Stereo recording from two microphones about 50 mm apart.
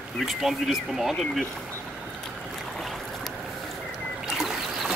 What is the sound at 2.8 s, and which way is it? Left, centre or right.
Boat, centre.